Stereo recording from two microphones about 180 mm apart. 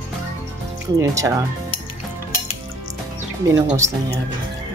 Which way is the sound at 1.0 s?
15° right (ahead or behind).